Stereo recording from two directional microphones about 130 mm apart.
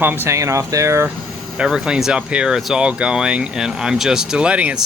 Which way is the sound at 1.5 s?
5° right (ahead or behind).